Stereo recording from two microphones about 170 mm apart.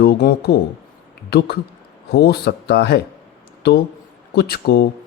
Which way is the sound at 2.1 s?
70° left (ahead or behind).